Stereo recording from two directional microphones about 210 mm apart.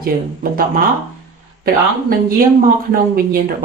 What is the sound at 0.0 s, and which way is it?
Speech, 45° right (ahead or behind).